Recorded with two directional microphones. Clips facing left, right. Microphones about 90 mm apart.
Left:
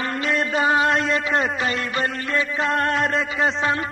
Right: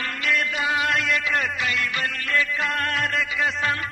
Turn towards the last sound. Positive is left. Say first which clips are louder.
# left 3 dB
turn(degrees=30)  # may be behind; listen again after turning